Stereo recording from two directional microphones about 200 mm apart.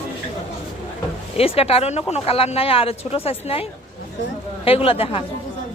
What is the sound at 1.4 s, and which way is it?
A woman's voice, 30° left (ahead or behind).